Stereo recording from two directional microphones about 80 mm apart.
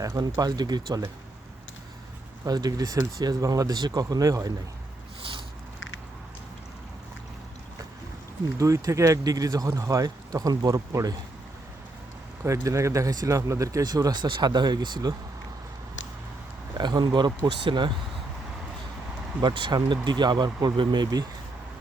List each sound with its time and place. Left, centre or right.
0.0 s speech: right
2.4 s speech: right
8.5 s speech: right
12.4 s speech: right
16.7 s speech: right
19.4 s speech: right